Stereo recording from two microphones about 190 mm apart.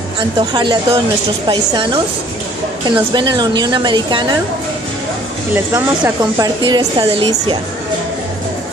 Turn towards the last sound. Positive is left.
turn(degrees=-25)  # may be behind; listen again after turning